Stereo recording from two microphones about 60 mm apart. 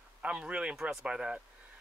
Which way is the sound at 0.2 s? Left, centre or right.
Centre.